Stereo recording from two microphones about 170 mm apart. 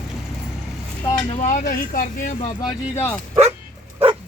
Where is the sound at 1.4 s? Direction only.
45° left (ahead or behind).